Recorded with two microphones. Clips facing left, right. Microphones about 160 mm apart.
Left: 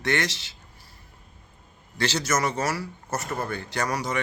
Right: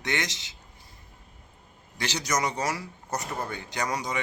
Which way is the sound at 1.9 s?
15° right (ahead or behind).